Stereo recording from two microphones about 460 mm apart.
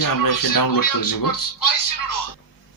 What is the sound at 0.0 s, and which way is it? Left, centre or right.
Speech, left.